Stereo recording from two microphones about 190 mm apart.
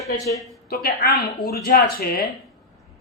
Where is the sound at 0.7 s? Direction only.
55° left (ahead or behind).